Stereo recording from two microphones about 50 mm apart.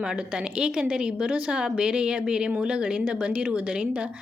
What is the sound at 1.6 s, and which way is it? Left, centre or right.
A woman's voice, centre.